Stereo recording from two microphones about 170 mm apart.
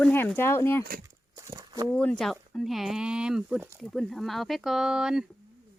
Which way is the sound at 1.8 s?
5° left (ahead or behind).